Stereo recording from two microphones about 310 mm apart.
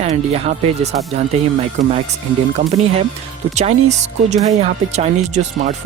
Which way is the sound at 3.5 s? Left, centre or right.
Right.